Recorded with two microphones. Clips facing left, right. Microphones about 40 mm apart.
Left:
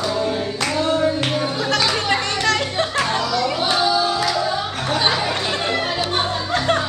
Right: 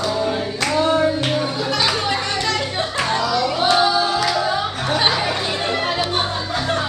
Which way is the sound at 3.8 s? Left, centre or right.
Right.